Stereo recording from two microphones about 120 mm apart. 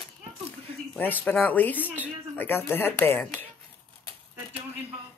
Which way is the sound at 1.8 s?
15° right (ahead or behind).